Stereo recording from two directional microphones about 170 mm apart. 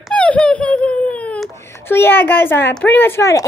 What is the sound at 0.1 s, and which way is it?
A woman's voice, 5° left (ahead or behind).